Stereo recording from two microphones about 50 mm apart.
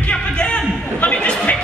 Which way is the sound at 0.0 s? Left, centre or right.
Left.